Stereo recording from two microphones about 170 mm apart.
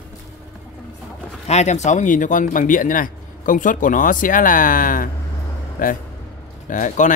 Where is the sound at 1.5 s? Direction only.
40° left (ahead or behind).